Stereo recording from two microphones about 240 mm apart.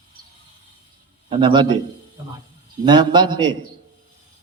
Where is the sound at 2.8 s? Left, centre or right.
Centre.